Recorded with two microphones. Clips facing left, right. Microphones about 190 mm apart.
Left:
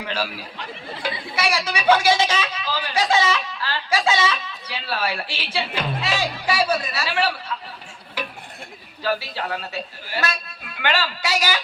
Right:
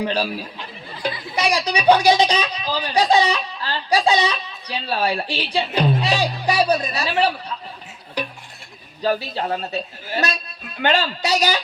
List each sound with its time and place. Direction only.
0.0 s speech: 15° right (ahead or behind)
6.1 s speech: 40° right (ahead or behind)
6.9 s speech: 20° right (ahead or behind)
9.3 s a man's voice: 20° right (ahead or behind)
10.2 s music: 40° right (ahead or behind)
10.8 s a man's voice: 20° right (ahead or behind)